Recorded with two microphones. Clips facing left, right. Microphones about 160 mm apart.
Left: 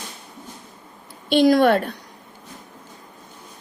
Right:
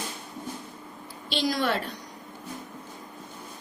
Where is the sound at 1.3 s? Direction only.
55° left (ahead or behind).